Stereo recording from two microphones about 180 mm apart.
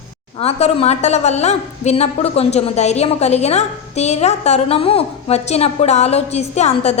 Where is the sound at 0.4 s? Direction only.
35° left (ahead or behind).